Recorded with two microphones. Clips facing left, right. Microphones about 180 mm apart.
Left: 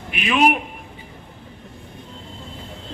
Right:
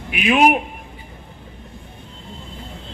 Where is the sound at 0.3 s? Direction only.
50° right (ahead or behind).